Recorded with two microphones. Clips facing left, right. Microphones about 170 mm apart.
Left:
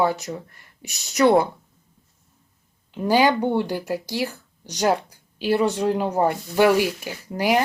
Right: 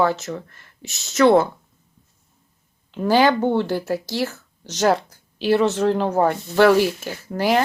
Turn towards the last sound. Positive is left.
turn(degrees=10)  # may be behind; listen again after turning